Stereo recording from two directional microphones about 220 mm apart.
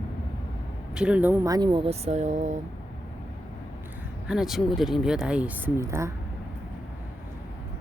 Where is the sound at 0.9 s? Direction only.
5° right (ahead or behind); by 2.5 s 30° right (ahead or behind).